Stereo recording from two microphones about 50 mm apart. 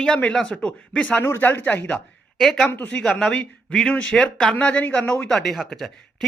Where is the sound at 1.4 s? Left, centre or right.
Left.